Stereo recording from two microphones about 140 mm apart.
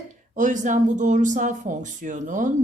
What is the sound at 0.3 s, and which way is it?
Speech, 65° right (ahead or behind).